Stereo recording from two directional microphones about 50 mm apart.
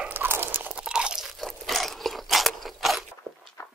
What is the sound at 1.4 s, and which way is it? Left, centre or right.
Crunch, centre.